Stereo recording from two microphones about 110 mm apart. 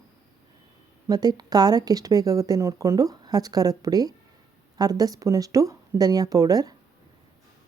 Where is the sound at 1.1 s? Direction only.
35° right (ahead or behind).